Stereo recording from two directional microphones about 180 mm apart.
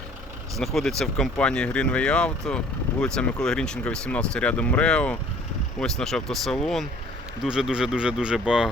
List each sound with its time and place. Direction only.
0.5 s speech: centre (ahead or behind)